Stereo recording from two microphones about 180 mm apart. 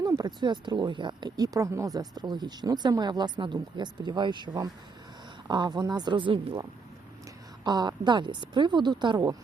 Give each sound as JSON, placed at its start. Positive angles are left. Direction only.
{"t": 0.0, "sound": "speech", "side_deg": -20}